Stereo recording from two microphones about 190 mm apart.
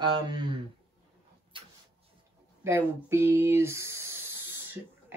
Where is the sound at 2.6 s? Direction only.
15° right (ahead or behind).